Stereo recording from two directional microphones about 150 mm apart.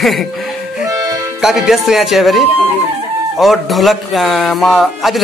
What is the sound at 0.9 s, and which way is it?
Music, 25° right (ahead or behind).